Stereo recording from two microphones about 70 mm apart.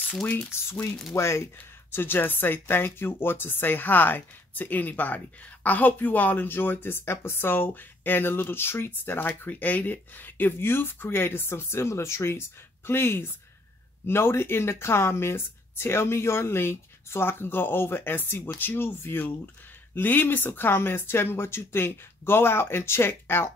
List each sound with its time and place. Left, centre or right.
0.5 s speech: left